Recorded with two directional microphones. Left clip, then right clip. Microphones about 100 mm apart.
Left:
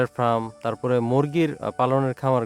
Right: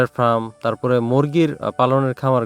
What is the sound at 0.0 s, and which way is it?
Speech, 45° right (ahead or behind).